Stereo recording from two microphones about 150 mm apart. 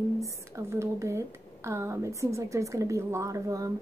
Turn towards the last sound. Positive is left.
turn(degrees=-20)  # may be behind; listen again after turning